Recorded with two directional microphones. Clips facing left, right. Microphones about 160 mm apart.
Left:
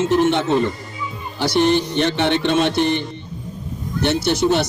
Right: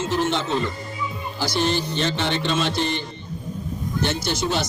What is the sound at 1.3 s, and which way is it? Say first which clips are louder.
A man's voice: left 7 dB; 65° left (ahead or behind).